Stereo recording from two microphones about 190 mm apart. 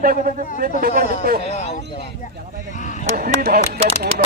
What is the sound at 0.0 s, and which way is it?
A man's voice, 45° right (ahead or behind).